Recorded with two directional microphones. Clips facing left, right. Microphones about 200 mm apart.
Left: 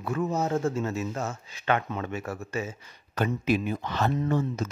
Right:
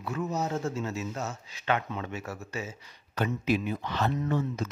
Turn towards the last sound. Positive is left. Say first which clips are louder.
# left 3 dB
turn(degrees=45)  # may be behind; listen again after turning